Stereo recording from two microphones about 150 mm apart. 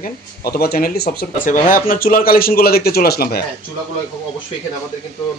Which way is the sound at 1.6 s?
70° left (ahead or behind).